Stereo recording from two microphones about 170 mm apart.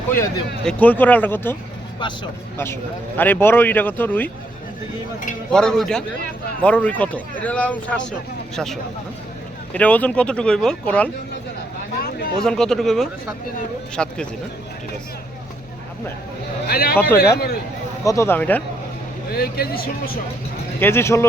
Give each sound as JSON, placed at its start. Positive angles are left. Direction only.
{"t": 0.6, "sound": "speech", "side_deg": 5}
{"t": 2.0, "sound": "speech", "side_deg": 25}
{"t": 3.2, "sound": "speech", "side_deg": 10}
{"t": 5.5, "sound": "speech", "side_deg": 5}
{"t": 11.9, "sound": "a sound", "side_deg": 60}
{"t": 12.4, "sound": "speech", "side_deg": 5}
{"t": 16.6, "sound": "speech", "side_deg": 65}
{"t": 18.0, "sound": "speech", "side_deg": 15}
{"t": 19.3, "sound": "speech", "side_deg": 60}
{"t": 20.7, "sound": "speech", "side_deg": 15}